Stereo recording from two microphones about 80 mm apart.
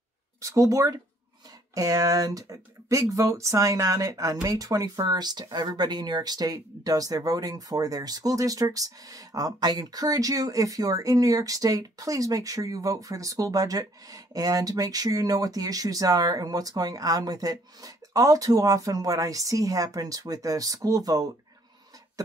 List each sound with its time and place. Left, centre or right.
0.4 s speech: right
5.1 s speech: right